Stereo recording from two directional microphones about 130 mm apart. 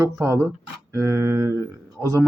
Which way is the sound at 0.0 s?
20° right (ahead or behind).